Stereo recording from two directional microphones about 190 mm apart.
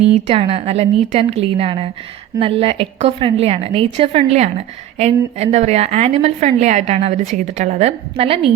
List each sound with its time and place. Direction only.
0.3 s a woman's voice: 30° right (ahead or behind)